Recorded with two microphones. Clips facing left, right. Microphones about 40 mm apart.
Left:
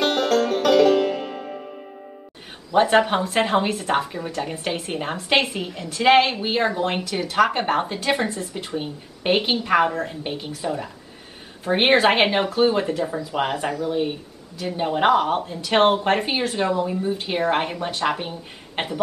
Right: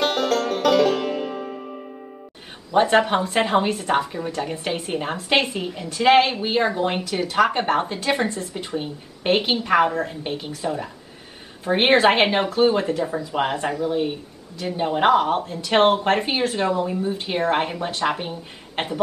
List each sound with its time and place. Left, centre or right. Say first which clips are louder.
0.0 s music: left 1 dB; centre
2.7 s a woman's voice: even; centre